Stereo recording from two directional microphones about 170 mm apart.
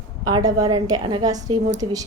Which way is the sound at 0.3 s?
20° right (ahead or behind).